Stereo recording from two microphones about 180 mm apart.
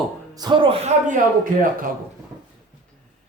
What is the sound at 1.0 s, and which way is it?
Speech, 50° right (ahead or behind).